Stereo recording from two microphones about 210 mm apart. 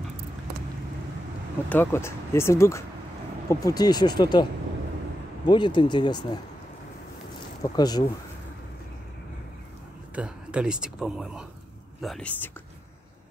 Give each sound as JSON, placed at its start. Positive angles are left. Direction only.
{"t": 1.7, "sound": "speech", "side_deg": 10}
{"t": 5.5, "sound": "speech", "side_deg": 20}
{"t": 7.6, "sound": "speech", "side_deg": 20}
{"t": 10.1, "sound": "speech", "side_deg": -5}